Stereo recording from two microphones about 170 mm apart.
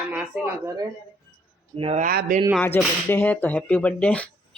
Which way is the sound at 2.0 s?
55° right (ahead or behind).